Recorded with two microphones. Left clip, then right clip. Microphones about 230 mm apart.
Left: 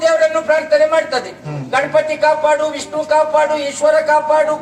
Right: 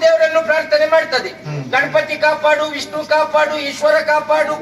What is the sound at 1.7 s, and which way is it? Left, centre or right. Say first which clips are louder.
A man's voice: left 1 dB; left.